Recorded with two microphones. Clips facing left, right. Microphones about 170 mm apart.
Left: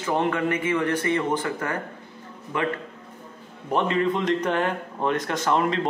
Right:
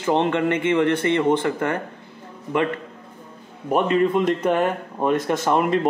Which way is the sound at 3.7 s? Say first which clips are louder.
Right 4 dB; 15° right (ahead or behind).